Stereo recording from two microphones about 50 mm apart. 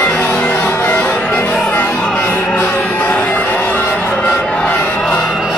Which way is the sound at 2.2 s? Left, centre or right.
Left.